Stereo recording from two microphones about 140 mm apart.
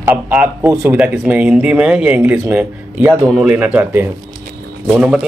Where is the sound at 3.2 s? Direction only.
Centre (ahead or behind).